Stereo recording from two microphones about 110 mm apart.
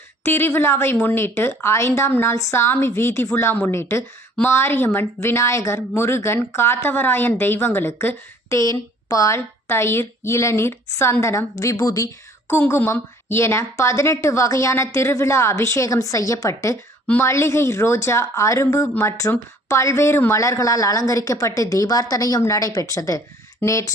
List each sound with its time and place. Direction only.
0.3 s a woman's voice: 20° left (ahead or behind)